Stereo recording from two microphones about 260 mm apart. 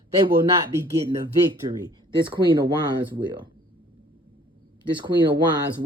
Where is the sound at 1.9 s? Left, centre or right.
Centre.